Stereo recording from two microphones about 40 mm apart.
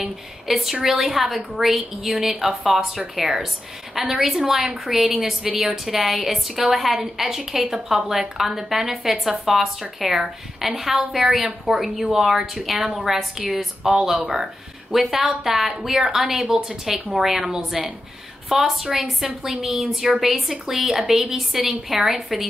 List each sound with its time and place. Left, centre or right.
0.5 s a woman's voice: centre
14.2 s speech: right
14.9 s a woman's voice: centre